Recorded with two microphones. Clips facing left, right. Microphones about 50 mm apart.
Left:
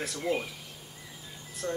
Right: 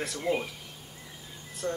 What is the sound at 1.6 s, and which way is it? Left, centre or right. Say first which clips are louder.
Speech: right 1 dB; centre.